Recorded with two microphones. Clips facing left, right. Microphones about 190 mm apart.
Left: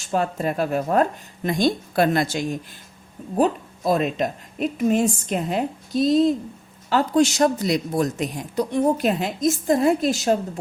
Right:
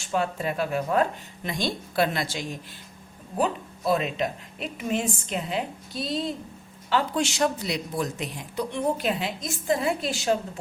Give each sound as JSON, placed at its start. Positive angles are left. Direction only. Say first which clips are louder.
{"t": 0.1, "sound": "a woman's voice", "louder": "left 4 dB", "side_deg": 40}